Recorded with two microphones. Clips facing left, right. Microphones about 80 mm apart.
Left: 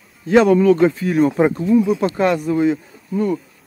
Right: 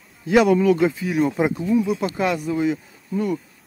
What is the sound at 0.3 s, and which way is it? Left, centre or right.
Speech, centre.